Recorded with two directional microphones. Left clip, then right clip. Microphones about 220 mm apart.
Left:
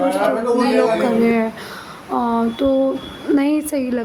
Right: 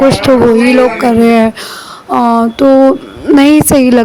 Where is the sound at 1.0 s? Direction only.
40° right (ahead or behind).